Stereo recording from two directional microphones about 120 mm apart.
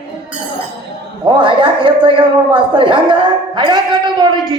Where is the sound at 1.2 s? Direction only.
45° right (ahead or behind).